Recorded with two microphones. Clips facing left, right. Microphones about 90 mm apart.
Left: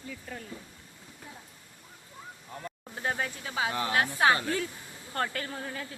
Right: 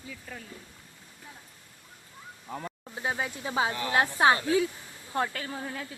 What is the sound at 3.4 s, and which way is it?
A woman's voice, 25° right (ahead or behind).